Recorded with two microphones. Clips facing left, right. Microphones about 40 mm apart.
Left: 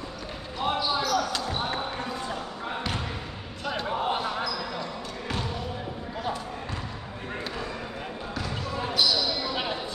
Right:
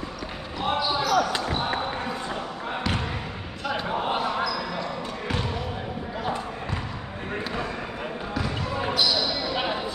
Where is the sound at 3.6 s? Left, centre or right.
Centre.